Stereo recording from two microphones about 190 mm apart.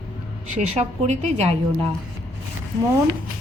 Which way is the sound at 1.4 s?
30° right (ahead or behind).